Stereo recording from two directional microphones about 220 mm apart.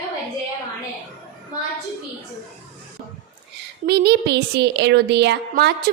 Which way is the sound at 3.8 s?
45° right (ahead or behind).